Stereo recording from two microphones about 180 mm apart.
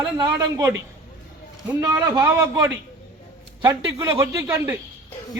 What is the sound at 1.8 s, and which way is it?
Speech, 20° right (ahead or behind).